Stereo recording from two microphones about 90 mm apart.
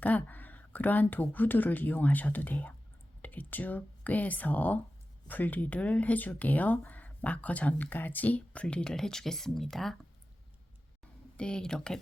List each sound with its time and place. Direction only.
0.0 s speech: 15° left (ahead or behind)
11.3 s speech: 10° left (ahead or behind)